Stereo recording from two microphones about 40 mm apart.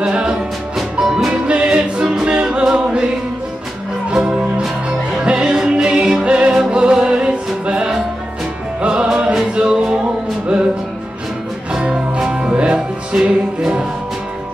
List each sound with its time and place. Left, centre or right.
0.0 s music: right
1.5 s music: right
4.1 s music: right
11.7 s music: right